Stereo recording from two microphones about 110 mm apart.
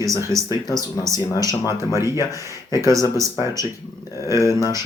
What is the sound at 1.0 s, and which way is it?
Speech, 30° right (ahead or behind).